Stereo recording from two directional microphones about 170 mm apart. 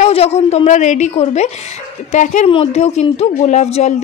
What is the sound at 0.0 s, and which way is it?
Speech, 40° left (ahead or behind).